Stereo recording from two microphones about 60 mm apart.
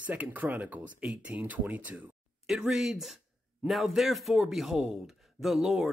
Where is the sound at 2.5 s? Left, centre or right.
Centre.